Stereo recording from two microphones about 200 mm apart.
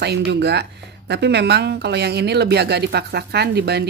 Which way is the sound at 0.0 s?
55° right (ahead or behind).